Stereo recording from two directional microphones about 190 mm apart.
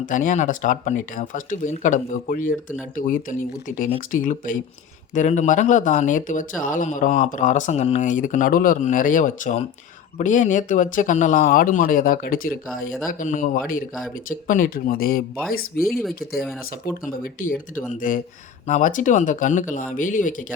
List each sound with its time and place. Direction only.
0.0 s speech: 45° left (ahead or behind)